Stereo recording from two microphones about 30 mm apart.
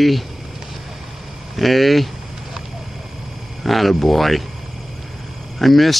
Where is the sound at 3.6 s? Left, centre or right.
Centre.